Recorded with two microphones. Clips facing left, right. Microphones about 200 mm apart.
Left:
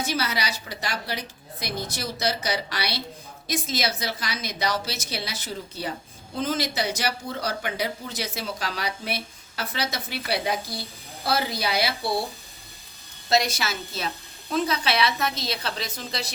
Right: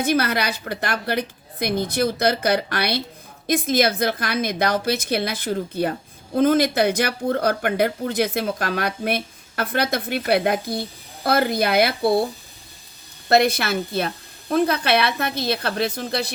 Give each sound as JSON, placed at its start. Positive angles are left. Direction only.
{"t": 0.0, "sound": "speech", "side_deg": -55}
{"t": 13.2, "sound": "speech", "side_deg": -60}